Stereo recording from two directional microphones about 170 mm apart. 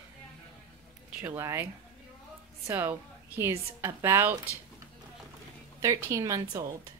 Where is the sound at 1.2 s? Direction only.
15° right (ahead or behind).